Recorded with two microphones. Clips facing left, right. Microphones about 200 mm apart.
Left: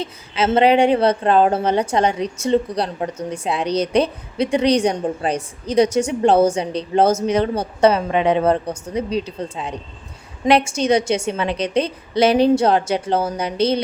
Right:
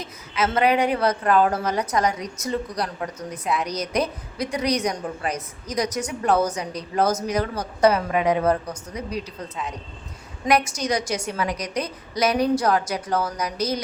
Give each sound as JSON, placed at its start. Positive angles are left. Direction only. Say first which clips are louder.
{"t": 0.0, "sound": "speech", "louder": "left 4 dB", "side_deg": 30}